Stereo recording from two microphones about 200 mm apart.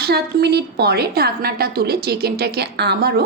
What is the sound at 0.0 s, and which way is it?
A woman's voice, 50° right (ahead or behind).